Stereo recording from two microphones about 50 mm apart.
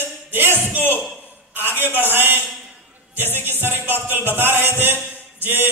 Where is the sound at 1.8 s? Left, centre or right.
Right.